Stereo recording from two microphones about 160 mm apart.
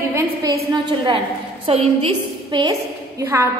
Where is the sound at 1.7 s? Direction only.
35° right (ahead or behind); by 3.4 s 15° right (ahead or behind).